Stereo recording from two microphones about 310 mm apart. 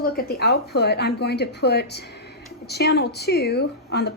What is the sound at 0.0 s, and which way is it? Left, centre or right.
Speech, left.